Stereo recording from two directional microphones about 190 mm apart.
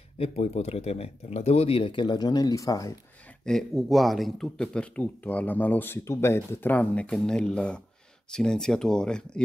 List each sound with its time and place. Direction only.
0.2 s speech: 35° left (ahead or behind); by 2.9 s 20° left (ahead or behind)
3.4 s speech: centre (ahead or behind)